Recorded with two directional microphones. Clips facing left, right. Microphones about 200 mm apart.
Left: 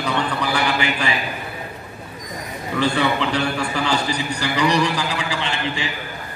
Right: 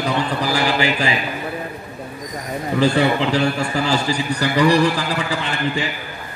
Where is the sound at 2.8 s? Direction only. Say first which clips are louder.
Right 3 dB; 35° right (ahead or behind).